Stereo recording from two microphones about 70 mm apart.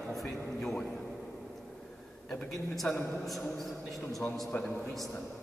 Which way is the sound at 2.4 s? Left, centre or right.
Left.